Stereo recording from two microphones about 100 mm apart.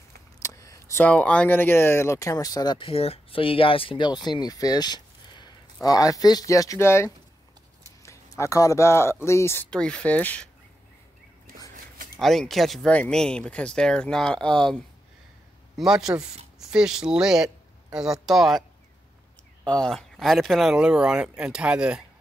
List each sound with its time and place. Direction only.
0.4 s a sound: 35° left (ahead or behind)
1.0 s speech: 15° left (ahead or behind); by 2.8 s 40° left (ahead or behind)
2.8 s speech: 75° left (ahead or behind); by 9.7 s 25° left (ahead or behind)
9.7 s speech: 10° left (ahead or behind)
12.2 s speech: centre (ahead or behind)
15.7 s speech: 5° right (ahead or behind)
19.6 s speech: 10° left (ahead or behind); by 22.0 s 10° right (ahead or behind)